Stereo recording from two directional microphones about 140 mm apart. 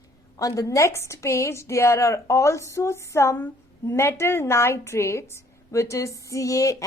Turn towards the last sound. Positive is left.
turn(degrees=25)  # may be behind; listen again after turning